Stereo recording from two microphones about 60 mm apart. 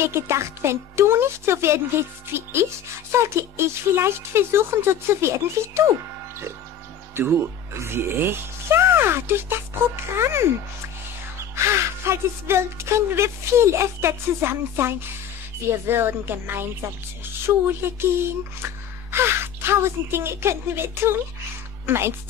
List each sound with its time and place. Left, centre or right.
0.0 s speech: right
7.2 s speech: right
11.5 s a woman's voice: right
19.1 s speech: right